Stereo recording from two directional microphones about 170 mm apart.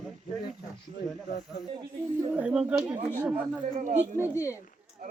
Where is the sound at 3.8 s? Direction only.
45° right (ahead or behind).